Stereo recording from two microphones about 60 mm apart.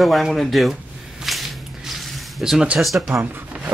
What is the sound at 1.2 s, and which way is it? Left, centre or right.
Squish, centre.